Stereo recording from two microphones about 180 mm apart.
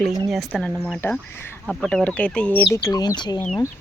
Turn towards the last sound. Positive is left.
turn(degrees=25)  # may be behind; listen again after turning